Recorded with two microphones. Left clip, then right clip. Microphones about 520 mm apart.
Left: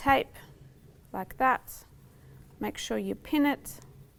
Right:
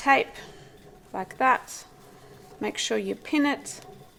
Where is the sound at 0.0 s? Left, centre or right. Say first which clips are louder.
Right 4 dB; left.